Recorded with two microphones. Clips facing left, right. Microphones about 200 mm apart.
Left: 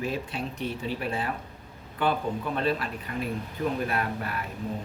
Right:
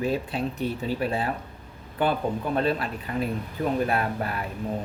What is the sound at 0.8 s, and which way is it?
Speech, 35° right (ahead or behind).